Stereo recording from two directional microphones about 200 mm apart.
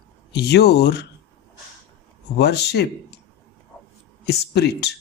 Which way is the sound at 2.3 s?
55° left (ahead or behind).